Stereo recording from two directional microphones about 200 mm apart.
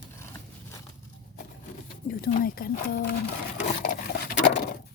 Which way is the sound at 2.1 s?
50° left (ahead or behind).